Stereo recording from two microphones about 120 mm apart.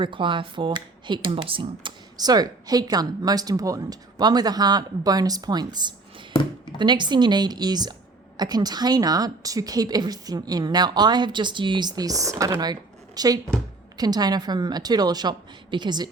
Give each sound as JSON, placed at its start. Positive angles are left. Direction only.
{"t": 0.0, "sound": "speech", "side_deg": -45}
{"t": 2.1, "sound": "a woman's voice", "side_deg": -35}